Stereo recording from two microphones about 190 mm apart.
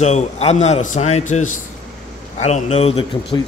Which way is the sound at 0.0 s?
35° left (ahead or behind).